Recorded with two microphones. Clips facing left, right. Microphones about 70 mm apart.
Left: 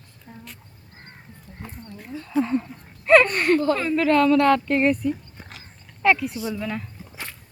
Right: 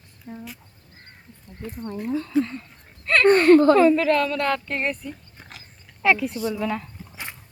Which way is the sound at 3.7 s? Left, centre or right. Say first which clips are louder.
Right 3 dB; centre.